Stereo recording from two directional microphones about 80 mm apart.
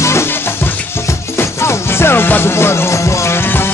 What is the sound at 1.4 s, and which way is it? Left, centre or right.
Music, left.